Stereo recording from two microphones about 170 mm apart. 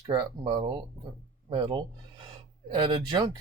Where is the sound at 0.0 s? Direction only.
25° right (ahead or behind).